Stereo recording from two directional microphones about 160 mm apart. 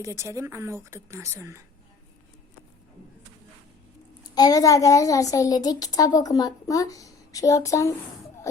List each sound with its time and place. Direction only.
0.0 s a woman's voice: 20° right (ahead or behind)
4.2 s a child's voice: 25° left (ahead or behind)